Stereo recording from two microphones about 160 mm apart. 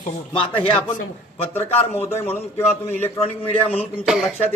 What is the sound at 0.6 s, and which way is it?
Speech, 10° left (ahead or behind).